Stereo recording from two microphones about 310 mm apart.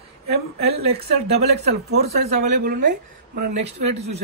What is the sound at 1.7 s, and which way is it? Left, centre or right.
Speech, right.